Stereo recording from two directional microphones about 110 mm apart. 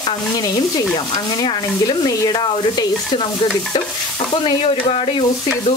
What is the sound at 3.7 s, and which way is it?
Stir, 50° left (ahead or behind).